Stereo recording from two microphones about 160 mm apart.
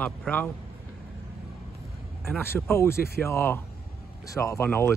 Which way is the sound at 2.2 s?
15° left (ahead or behind).